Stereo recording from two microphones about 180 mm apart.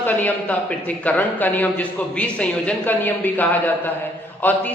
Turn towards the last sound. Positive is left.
turn(degrees=10)  # may be behind; listen again after turning